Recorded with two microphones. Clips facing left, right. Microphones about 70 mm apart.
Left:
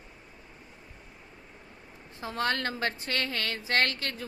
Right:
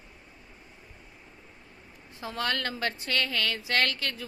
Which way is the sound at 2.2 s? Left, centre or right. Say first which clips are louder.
Left 1 dB; left.